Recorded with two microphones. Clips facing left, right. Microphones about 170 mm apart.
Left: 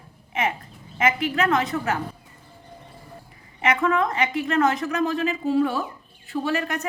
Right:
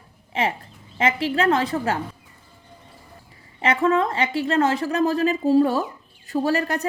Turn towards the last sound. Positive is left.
turn(degrees=-35)  # may be behind; listen again after turning